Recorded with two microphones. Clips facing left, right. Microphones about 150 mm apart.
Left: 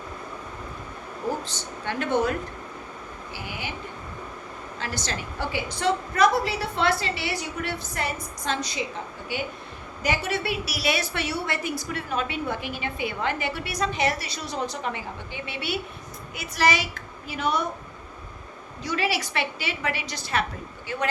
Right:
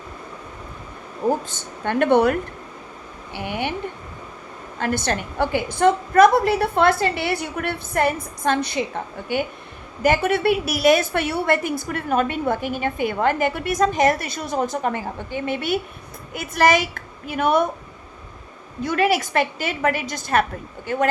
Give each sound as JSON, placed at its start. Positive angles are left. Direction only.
{"t": 1.5, "sound": "a woman's voice", "side_deg": -50}
{"t": 3.3, "sound": "a woman's voice", "side_deg": -60}
{"t": 4.8, "sound": "a woman's voice", "side_deg": -55}
{"t": 18.8, "sound": "a woman's voice", "side_deg": -50}